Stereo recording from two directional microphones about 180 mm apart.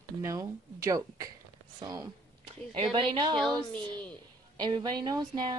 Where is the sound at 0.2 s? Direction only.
20° right (ahead or behind).